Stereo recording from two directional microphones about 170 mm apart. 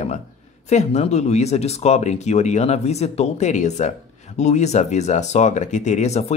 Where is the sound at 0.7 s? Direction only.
40° left (ahead or behind).